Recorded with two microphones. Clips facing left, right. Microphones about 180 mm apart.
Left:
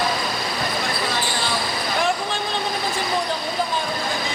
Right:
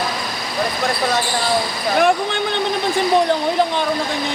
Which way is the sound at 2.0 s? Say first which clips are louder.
Right 8 dB; 60° right (ahead or behind).